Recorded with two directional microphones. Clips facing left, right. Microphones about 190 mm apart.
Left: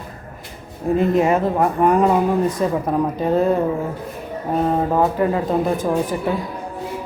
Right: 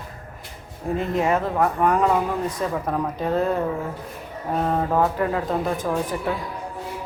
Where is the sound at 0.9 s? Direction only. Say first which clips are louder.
Left 5 dB; 10° left (ahead or behind).